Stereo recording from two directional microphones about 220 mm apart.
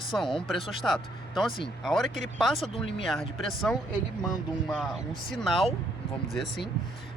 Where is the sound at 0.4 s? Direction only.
Centre (ahead or behind).